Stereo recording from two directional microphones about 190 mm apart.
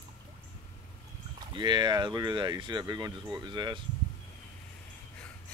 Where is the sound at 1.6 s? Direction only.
25° right (ahead or behind).